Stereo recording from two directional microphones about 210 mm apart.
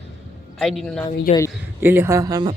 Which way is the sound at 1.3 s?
35° left (ahead or behind).